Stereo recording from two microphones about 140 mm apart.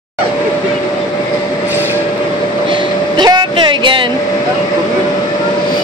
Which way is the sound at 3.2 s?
35° right (ahead or behind).